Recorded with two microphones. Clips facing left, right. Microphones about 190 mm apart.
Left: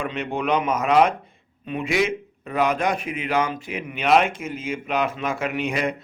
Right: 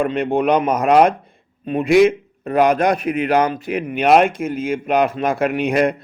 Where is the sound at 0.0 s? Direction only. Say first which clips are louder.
Right 9 dB; 55° right (ahead or behind).